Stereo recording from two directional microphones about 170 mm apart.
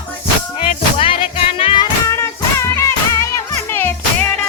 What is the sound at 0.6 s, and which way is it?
Music, 30° left (ahead or behind).